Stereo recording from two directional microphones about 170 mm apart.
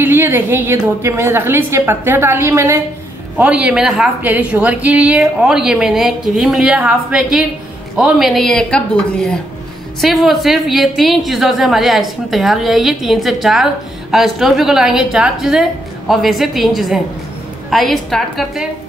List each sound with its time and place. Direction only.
0.0 s a woman's voice: 15° right (ahead or behind)
3.3 s a woman's voice: 5° right (ahead or behind)